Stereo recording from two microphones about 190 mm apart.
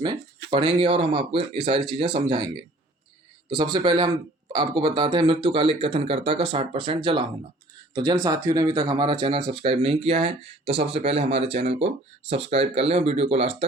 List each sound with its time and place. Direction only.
0.5 s speech: 30° right (ahead or behind)
3.5 s speech: 25° right (ahead or behind)